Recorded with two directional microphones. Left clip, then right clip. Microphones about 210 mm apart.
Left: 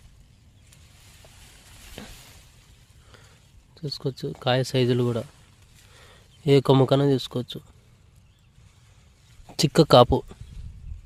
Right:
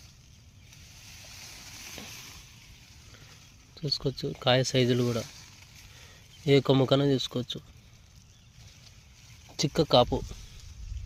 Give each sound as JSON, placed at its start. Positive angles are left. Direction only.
{"t": 2.0, "sound": "sizzle", "side_deg": 50}
{"t": 3.8, "sound": "speech", "side_deg": 20}
{"t": 6.4, "sound": "speech", "side_deg": 35}
{"t": 9.6, "sound": "speech", "side_deg": 50}